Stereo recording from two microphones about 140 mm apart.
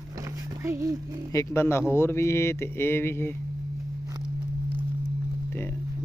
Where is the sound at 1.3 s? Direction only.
20° left (ahead or behind).